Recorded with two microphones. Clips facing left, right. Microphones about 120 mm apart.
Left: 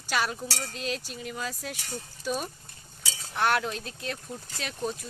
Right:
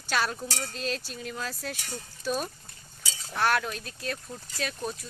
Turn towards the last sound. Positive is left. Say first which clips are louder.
# even
turn(degrees=20)  # may be behind; listen again after turning